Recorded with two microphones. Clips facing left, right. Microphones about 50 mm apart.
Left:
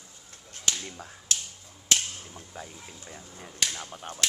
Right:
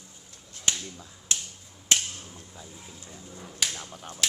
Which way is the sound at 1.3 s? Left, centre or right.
Right.